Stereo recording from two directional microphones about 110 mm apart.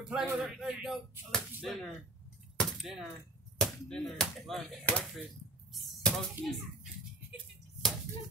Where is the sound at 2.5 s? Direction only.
Centre (ahead or behind).